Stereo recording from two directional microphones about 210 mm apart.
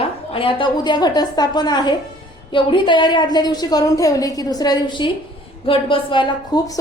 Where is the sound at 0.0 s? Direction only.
25° left (ahead or behind).